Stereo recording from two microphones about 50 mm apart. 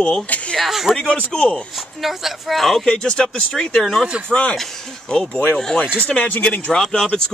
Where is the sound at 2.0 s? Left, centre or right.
Centre.